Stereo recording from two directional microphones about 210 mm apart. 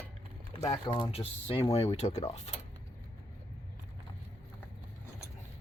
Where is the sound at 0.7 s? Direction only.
20° left (ahead or behind).